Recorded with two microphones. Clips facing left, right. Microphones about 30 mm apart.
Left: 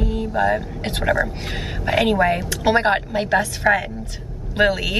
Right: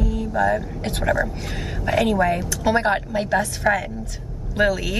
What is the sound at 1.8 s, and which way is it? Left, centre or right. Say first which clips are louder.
A man's voice: left 2 dB; left.